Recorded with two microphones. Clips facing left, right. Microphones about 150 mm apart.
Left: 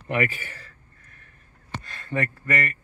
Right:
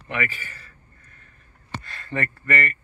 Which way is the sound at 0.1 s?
45° left (ahead or behind).